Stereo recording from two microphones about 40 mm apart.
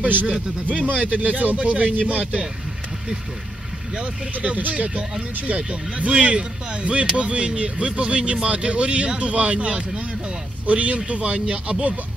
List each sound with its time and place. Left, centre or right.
0.0 s speech: right
3.9 s speech: right
4.6 s speech: right